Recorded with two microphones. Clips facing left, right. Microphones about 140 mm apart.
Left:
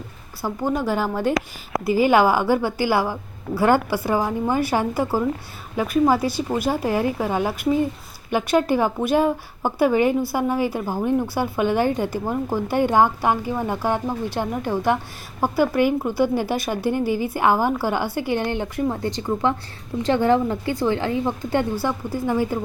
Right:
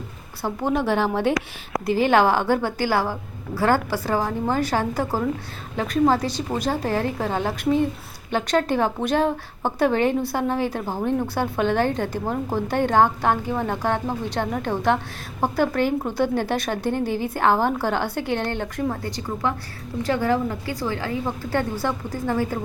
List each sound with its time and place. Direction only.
0.6 s a woman's voice: centre (ahead or behind)